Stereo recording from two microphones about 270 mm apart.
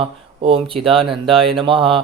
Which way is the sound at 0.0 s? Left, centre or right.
Centre.